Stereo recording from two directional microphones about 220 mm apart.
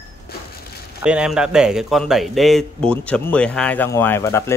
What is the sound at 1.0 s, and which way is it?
A man's voice, 5° right (ahead or behind).